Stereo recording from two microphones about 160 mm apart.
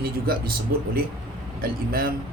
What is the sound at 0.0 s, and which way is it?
Speech, 65° right (ahead or behind).